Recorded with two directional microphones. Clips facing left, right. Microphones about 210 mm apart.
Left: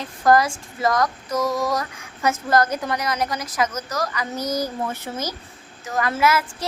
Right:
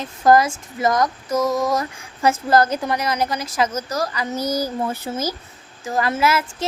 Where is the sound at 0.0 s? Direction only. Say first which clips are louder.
Right 2 dB; 25° right (ahead or behind).